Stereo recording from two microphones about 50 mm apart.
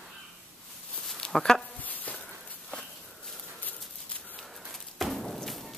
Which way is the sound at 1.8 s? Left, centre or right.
Left.